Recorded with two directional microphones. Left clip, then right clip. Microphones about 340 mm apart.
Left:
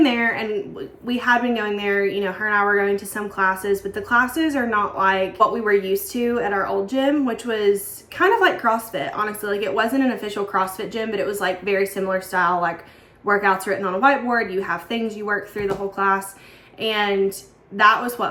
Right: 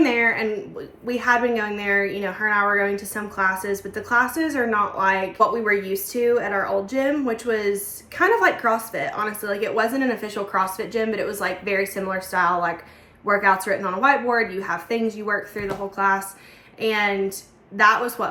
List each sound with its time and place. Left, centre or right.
0.0 s a sound: centre
1.0 s speech: centre
6.2 s speech: centre